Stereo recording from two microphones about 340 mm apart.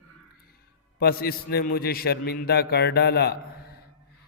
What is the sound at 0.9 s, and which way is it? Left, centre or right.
Mantra, left.